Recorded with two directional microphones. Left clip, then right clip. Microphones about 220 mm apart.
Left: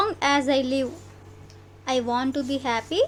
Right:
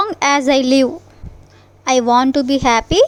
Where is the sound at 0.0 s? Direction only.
40° right (ahead or behind).